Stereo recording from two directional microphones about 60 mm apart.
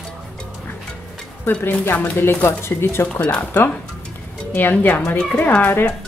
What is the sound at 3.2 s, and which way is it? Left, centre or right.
Speech, left.